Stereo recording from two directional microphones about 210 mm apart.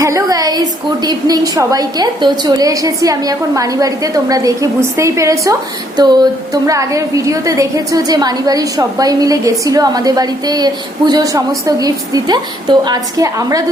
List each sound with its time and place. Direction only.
0.0 s a woman's voice: 15° right (ahead or behind)
6.0 s a sound: 20° right (ahead or behind)
6.5 s a woman's voice: 15° right (ahead or behind)